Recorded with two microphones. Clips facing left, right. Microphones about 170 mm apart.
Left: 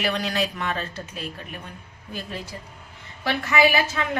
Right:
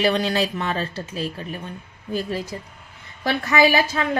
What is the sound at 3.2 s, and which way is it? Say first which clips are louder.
Speech: right 2 dB; 35° right (ahead or behind).